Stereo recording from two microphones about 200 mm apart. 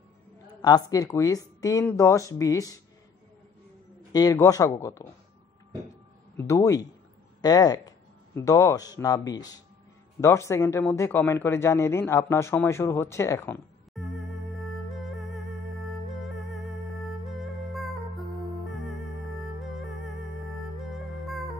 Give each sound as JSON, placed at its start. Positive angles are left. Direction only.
{"t": 0.6, "sound": "a woman's voice", "side_deg": 20}
{"t": 4.1, "sound": "speech", "side_deg": 20}
{"t": 6.3, "sound": "a woman's voice", "side_deg": 15}
{"t": 13.9, "sound": "music", "side_deg": 0}